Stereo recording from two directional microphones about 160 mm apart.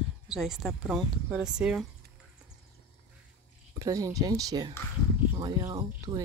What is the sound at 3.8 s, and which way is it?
Speech, 20° right (ahead or behind).